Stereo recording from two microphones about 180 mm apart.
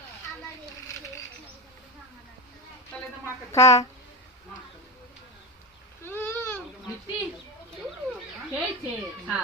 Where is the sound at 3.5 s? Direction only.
15° left (ahead or behind).